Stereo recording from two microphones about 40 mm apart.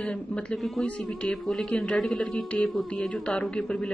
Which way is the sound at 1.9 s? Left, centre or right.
Centre.